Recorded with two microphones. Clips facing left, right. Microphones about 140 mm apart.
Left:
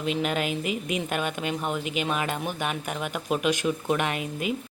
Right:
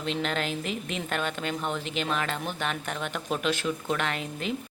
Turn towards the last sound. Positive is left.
turn(degrees=10)  # may be behind; listen again after turning